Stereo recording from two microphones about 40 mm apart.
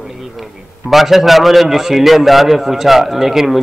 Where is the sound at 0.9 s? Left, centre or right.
Centre.